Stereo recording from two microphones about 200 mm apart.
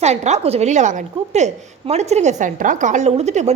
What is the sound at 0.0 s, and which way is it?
A woman's voice, 35° right (ahead or behind).